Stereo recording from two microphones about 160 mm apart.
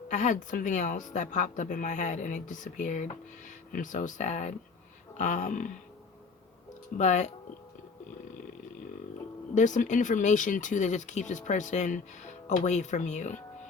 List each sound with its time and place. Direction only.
0.1 s speech: 50° left (ahead or behind)
7.0 s speech: 45° left (ahead or behind)
9.6 s speech: 50° left (ahead or behind)